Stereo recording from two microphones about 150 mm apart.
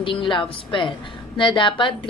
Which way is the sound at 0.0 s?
35° left (ahead or behind).